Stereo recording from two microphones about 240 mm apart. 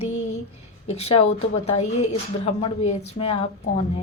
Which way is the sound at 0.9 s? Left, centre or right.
Left.